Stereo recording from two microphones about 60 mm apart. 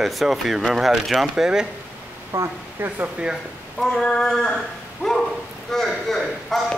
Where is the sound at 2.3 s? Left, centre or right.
Right.